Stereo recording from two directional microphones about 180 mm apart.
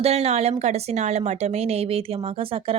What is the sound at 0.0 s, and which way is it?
Speech, 35° right (ahead or behind).